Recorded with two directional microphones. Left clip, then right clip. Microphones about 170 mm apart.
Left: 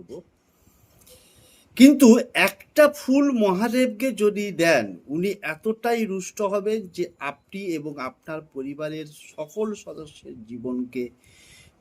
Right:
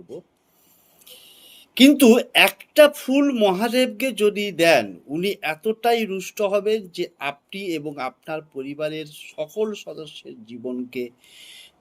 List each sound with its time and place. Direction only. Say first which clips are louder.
1.0 s speech: right 8 dB; 25° left (ahead or behind)